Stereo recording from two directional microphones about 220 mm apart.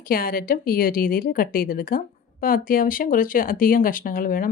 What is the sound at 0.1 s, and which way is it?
Speech, 40° left (ahead or behind).